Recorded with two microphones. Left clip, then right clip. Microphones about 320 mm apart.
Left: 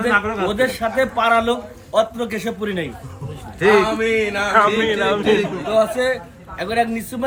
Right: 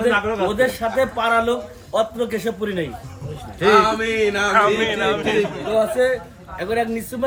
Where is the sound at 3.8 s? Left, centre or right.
Right.